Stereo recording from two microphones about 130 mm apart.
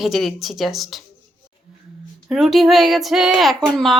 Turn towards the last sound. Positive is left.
turn(degrees=0)  # may be behind; listen again after turning